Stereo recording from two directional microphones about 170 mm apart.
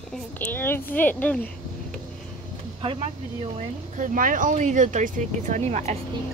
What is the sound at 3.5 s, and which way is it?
Speech, 50° right (ahead or behind).